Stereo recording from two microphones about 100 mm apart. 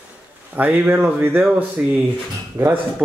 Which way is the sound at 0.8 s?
15° right (ahead or behind).